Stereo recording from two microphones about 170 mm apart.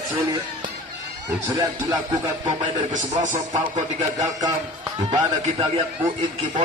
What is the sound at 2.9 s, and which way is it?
Speech, 50° right (ahead or behind).